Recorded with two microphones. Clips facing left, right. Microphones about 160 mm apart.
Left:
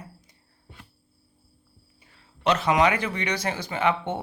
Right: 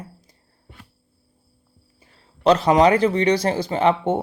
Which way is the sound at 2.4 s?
35° right (ahead or behind).